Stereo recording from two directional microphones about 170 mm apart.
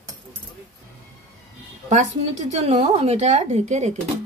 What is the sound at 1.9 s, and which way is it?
Speech, 45° right (ahead or behind).